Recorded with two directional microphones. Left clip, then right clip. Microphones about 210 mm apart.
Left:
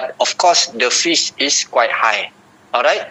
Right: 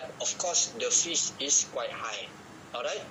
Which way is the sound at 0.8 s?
50° left (ahead or behind).